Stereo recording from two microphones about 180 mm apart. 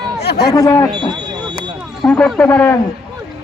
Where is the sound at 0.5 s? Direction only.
20° left (ahead or behind).